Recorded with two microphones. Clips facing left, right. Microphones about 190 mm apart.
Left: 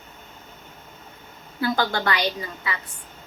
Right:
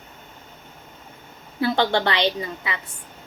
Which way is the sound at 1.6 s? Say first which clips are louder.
Right 3 dB; 25° right (ahead or behind).